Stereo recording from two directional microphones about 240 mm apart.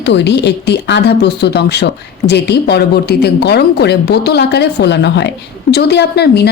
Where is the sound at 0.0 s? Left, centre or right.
Left.